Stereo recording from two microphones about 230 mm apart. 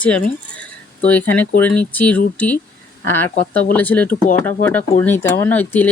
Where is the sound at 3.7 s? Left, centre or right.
Centre.